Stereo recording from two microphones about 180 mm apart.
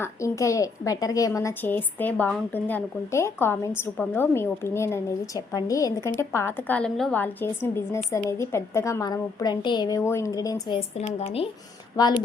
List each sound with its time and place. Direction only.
0.0 s a woman's voice: 15° left (ahead or behind)
10.8 s speech: 35° left (ahead or behind)
11.9 s speech: 25° left (ahead or behind)